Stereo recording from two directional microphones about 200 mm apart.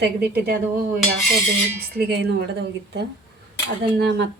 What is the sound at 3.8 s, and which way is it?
Speech, 55° right (ahead or behind).